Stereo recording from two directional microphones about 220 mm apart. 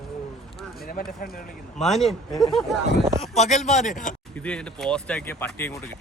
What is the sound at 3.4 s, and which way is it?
Speech, 30° left (ahead or behind).